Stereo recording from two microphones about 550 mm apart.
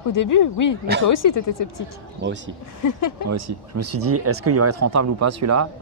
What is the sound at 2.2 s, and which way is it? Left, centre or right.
Speech, centre.